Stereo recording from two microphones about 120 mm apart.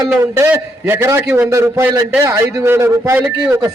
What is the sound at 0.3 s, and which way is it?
A man's voice, 20° right (ahead or behind).